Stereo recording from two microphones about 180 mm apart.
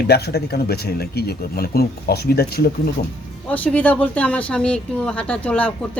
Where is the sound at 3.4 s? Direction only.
10° left (ahead or behind).